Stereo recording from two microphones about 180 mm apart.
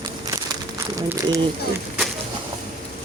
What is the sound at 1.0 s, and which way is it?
Speech, 15° right (ahead or behind).